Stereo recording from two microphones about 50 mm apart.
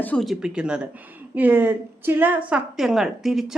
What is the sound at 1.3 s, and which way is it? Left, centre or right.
A woman's voice, right.